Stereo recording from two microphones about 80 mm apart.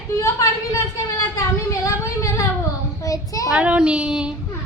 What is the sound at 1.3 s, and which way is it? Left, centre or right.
A child's voice, left.